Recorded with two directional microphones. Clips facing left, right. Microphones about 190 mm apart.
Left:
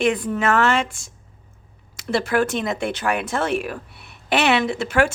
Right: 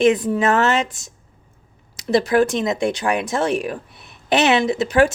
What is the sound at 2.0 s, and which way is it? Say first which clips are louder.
Speech: right 4 dB; 20° right (ahead or behind).